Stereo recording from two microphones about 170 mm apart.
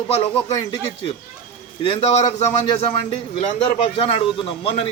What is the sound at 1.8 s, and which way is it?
A man's voice, 30° left (ahead or behind).